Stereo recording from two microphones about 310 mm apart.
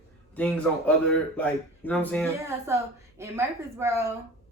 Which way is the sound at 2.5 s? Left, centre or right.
Centre.